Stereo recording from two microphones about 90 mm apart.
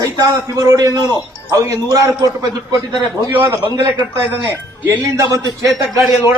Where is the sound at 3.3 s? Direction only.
20° right (ahead or behind).